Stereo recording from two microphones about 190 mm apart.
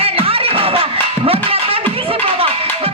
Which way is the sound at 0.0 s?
30° right (ahead or behind).